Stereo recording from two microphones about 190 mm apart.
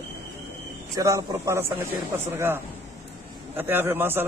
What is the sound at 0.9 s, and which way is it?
A man's voice, 15° right (ahead or behind).